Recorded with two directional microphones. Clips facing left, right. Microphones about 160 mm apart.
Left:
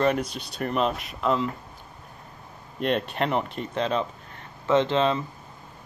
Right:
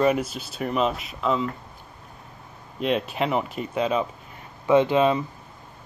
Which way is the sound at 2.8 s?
Centre (ahead or behind).